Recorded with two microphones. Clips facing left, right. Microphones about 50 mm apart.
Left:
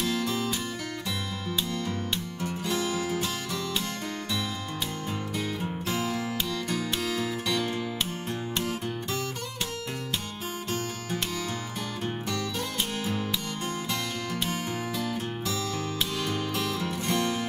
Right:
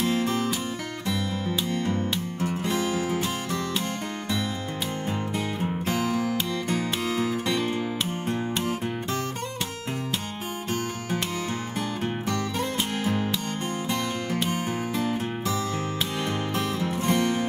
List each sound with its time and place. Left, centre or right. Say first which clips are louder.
0.0 s music: right 4 dB; right
1.7 s music: right 4 dB; right
5.6 s music: right 4 dB; right
12.3 s music: right 4 dB; right
14.5 s music: right 3 dB; right